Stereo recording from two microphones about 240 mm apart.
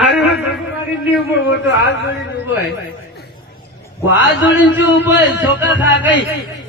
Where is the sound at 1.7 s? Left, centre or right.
Left.